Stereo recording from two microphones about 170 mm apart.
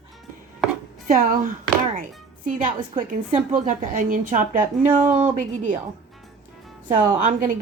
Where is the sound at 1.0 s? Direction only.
55° right (ahead or behind).